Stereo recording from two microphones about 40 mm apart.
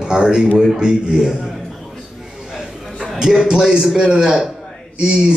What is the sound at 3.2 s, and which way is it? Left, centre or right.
Speech, centre.